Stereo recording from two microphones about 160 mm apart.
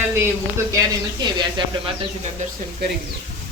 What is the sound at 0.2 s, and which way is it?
Speech, 15° right (ahead or behind).